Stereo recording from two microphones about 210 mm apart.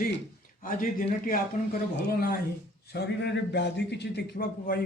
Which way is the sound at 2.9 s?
55° left (ahead or behind).